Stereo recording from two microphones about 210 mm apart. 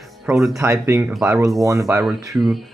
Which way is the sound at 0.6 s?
15° right (ahead or behind).